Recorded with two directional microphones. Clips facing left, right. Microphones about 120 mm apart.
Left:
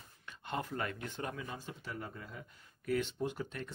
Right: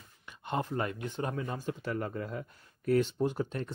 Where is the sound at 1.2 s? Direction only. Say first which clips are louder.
Right 8 dB; 45° right (ahead or behind).